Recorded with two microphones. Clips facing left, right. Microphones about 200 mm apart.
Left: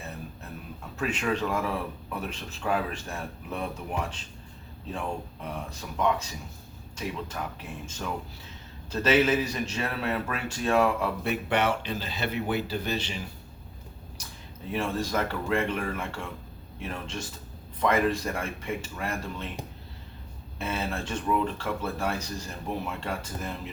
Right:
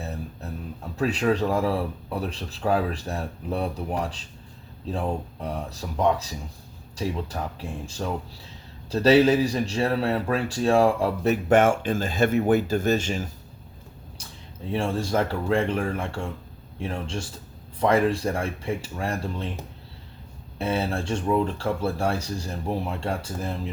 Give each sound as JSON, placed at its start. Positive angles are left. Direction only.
{"t": 0.9, "sound": "speech", "side_deg": -35}
{"t": 14.7, "sound": "speech", "side_deg": -30}
{"t": 20.6, "sound": "speech", "side_deg": -35}